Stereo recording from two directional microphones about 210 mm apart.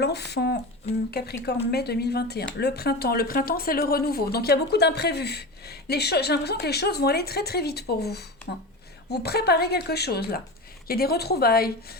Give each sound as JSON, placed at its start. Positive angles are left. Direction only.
{"t": 0.0, "sound": "speech", "side_deg": 50}